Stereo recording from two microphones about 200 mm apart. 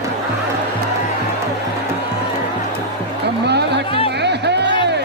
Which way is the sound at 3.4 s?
55° right (ahead or behind).